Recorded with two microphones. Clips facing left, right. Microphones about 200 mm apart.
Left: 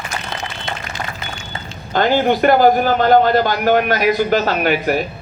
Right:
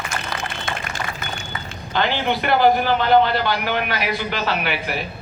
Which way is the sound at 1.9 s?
45° left (ahead or behind).